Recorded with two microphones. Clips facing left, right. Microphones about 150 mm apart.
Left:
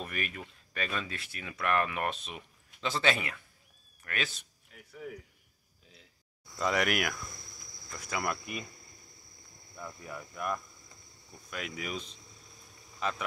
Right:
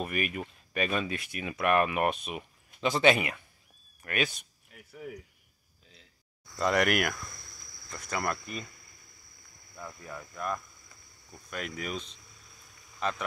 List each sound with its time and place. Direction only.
0.0 s speech: 10° right (ahead or behind)
6.6 s speech: centre (ahead or behind)
7.2 s cricket: 20° left (ahead or behind)
7.9 s speech: 5° left (ahead or behind)
8.6 s a sound: 25° left (ahead or behind)
9.8 s speech: 15° left (ahead or behind)
12.2 s a sound: 25° left (ahead or behind)